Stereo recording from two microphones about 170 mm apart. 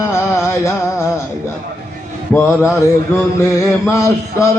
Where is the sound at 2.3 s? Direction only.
15° left (ahead or behind).